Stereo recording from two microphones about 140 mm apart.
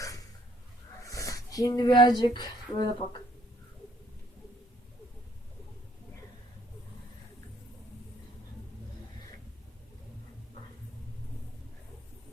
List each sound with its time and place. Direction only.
1.0 s speech: 25° left (ahead or behind)